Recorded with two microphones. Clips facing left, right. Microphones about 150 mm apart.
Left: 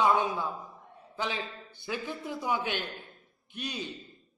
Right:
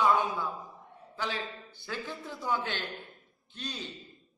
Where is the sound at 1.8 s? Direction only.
15° left (ahead or behind).